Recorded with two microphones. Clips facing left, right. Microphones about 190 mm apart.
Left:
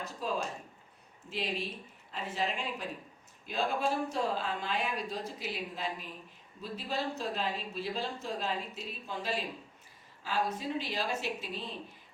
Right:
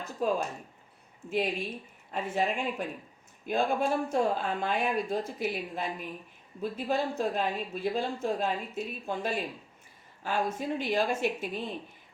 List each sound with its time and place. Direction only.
0.2 s speech: 50° right (ahead or behind)